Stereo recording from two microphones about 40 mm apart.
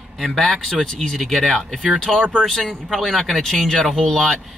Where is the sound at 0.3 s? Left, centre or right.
Centre.